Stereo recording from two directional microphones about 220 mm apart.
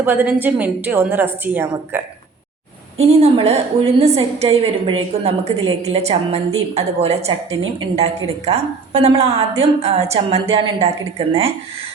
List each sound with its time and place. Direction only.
0.0 s a woman's voice: 10° right (ahead or behind)
3.0 s a woman's voice: 30° right (ahead or behind)